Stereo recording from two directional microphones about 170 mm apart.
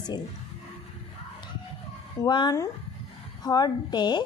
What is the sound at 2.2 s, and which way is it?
A woman's voice, 25° left (ahead or behind).